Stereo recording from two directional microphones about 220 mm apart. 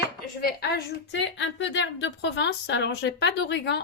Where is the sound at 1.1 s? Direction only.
55° left (ahead or behind).